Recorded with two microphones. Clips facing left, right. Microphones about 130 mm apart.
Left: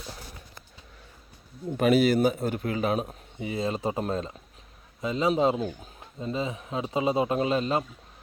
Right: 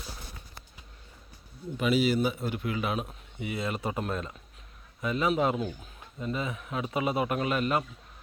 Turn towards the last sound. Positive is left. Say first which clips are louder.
# left 3 dB
turn(degrees=25)  # may be behind; listen again after turning